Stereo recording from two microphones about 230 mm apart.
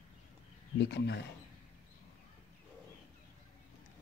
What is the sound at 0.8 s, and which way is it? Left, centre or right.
Speech, left.